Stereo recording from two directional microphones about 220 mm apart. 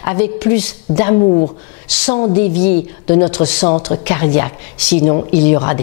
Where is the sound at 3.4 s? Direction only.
30° left (ahead or behind).